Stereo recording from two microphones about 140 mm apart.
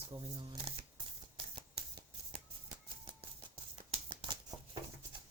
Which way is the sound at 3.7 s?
40° right (ahead or behind).